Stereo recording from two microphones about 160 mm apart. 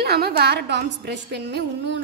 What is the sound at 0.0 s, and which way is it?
Speech, 80° right.